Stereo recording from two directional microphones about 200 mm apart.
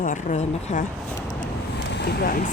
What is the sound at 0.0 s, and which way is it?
Speech, 40° left (ahead or behind).